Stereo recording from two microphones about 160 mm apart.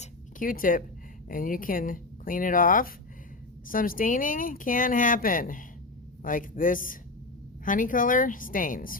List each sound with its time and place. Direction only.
0.0 s zipper: 60° left (ahead or behind)
1.3 s speech: 60° left (ahead or behind)